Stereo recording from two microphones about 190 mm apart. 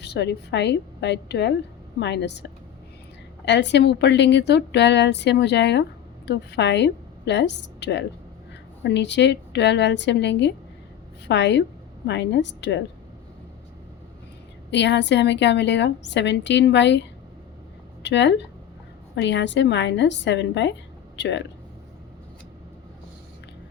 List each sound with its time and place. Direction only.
0.0 s a woman's voice: 60° left (ahead or behind)
14.7 s a woman's voice: 65° left (ahead or behind)
18.0 s a woman's voice: 65° left (ahead or behind)